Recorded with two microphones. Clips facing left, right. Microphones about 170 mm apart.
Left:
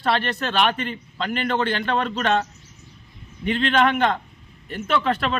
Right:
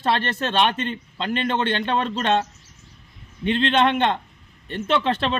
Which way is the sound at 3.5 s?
25° right (ahead or behind).